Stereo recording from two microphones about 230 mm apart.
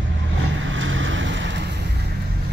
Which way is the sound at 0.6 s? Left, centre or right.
Right.